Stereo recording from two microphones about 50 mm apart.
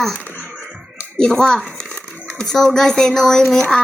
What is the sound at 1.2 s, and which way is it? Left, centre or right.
Speech, centre.